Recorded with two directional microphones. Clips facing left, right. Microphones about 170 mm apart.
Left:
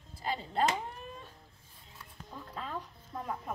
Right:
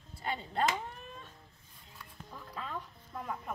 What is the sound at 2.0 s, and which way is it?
Music, 5° left (ahead or behind).